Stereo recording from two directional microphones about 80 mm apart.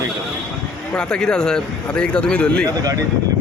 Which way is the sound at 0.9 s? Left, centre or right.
Centre.